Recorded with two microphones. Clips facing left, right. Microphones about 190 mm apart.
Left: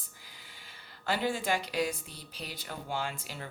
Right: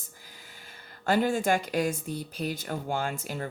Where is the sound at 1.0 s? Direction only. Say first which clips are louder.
Right 6 dB; 45° right (ahead or behind).